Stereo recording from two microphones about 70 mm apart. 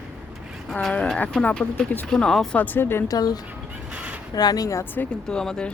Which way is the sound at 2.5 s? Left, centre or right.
Left.